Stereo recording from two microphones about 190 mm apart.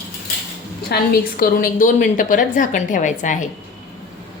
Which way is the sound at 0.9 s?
50° left (ahead or behind).